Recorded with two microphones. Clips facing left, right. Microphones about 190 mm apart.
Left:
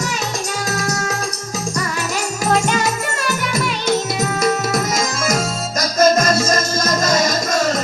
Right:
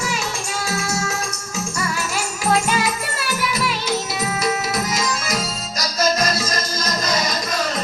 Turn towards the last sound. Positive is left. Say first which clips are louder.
# left 5 dB
turn(degrees=45)  # may be behind; listen again after turning